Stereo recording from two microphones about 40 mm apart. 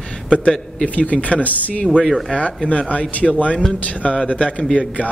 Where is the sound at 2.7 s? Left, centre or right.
Left.